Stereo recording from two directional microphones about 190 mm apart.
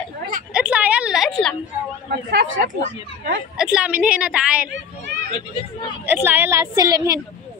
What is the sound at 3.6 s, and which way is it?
A woman's voice, 5° right (ahead or behind).